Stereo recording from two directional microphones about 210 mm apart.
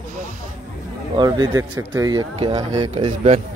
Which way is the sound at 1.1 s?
20° right (ahead or behind).